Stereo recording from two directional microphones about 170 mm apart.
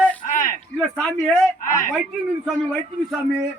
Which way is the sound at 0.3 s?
50° left (ahead or behind).